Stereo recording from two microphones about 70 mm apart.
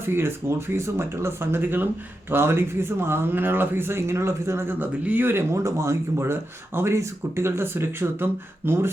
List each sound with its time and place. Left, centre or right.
0.0 s speech: right